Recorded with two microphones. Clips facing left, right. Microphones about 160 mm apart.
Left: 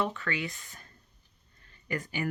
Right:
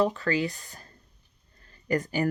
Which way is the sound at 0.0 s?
35° right (ahead or behind).